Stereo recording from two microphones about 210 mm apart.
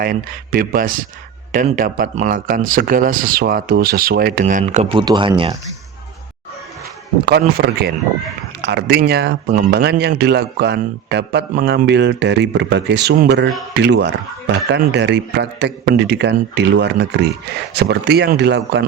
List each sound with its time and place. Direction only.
0.0 s speech: 40° right (ahead or behind); by 5.5 s 25° right (ahead or behind)
7.3 s speech: 50° right (ahead or behind)